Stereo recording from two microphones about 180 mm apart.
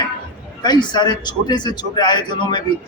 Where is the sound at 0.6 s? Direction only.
25° left (ahead or behind).